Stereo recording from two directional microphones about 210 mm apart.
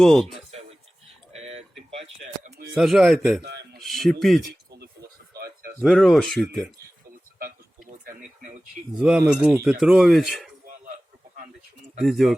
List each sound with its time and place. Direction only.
0.0 s speech: centre (ahead or behind)
1.0 s a sound: 30° right (ahead or behind)
2.7 s speech: centre (ahead or behind)
3.4 s a sound: 50° right (ahead or behind)
3.8 s speech: centre (ahead or behind)
5.8 s speech: centre (ahead or behind)
7.3 s a sound: 45° right (ahead or behind)
9.0 s speech: 5° right (ahead or behind)
11.9 s speech: centre (ahead or behind)